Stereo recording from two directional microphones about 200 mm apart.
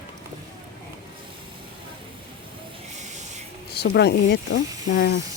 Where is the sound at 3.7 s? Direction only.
55° left (ahead or behind).